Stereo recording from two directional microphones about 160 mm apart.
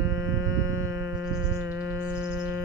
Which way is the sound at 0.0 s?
20° right (ahead or behind).